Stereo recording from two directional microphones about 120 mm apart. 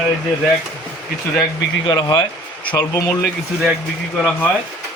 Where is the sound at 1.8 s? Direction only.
35° left (ahead or behind).